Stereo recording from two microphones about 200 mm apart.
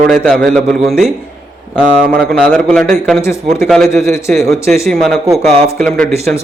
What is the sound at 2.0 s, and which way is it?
Speech, 50° right (ahead or behind).